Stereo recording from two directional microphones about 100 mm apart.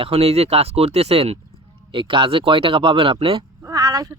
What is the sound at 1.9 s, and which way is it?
Speech, 60° right (ahead or behind).